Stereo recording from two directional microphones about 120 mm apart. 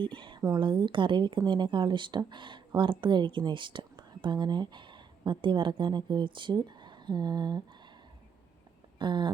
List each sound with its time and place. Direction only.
0.0 s speech: 40° right (ahead or behind)
9.0 s speech: 40° right (ahead or behind)